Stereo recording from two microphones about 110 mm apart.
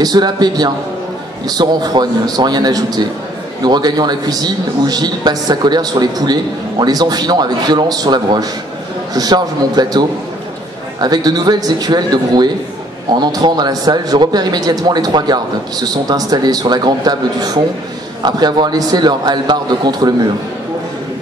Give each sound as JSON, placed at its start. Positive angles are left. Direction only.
{"t": 0.0, "sound": "a man's voice", "side_deg": -40}